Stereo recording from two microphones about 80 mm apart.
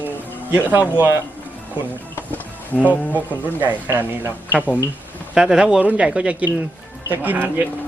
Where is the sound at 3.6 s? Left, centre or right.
Right.